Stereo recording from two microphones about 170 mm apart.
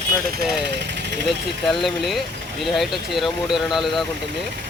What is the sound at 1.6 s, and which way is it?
Speech, centre (ahead or behind).